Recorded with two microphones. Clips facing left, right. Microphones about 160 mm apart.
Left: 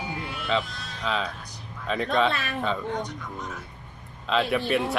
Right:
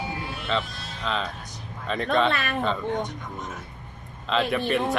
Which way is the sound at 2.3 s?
60° right (ahead or behind).